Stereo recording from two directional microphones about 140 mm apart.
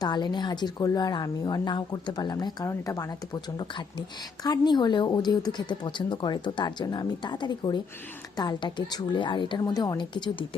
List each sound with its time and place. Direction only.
0.0 s a woman's voice: 30° left (ahead or behind)